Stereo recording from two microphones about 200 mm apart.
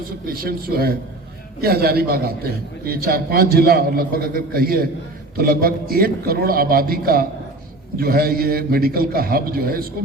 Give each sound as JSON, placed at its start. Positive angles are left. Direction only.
{"t": 0.3, "sound": "a man's voice", "side_deg": -50}